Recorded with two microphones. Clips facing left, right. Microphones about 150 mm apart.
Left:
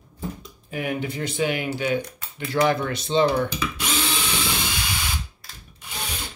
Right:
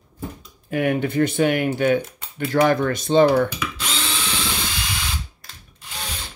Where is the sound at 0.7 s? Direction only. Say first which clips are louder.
Right 7 dB; 60° right (ahead or behind).